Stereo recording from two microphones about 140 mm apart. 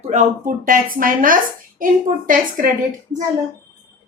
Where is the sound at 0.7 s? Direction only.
80° right.